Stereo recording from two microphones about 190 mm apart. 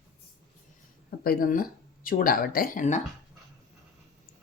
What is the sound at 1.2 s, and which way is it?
Speech, 50° left (ahead or behind).